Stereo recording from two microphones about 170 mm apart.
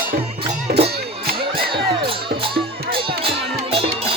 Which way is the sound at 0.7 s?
70° right (ahead or behind).